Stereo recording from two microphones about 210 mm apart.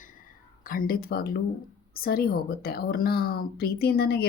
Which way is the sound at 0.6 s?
45° left (ahead or behind).